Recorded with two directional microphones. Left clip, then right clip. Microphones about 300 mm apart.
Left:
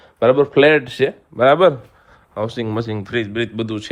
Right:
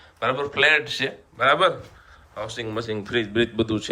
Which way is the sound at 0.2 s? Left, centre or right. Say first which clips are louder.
Left 9 dB; centre.